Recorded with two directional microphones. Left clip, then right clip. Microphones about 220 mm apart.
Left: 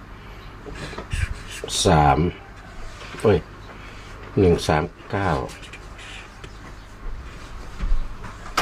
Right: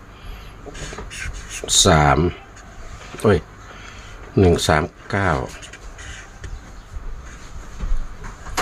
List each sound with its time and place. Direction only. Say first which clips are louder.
1.6 s speech: right 3 dB; 30° right (ahead or behind)